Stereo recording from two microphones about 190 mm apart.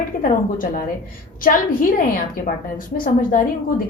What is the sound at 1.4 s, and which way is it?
A woman's voice, 50° left (ahead or behind).